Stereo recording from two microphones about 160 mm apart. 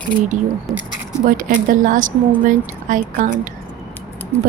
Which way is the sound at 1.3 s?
55° right (ahead or behind).